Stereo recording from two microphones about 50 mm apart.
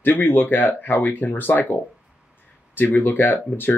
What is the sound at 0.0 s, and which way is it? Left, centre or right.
Speech, left.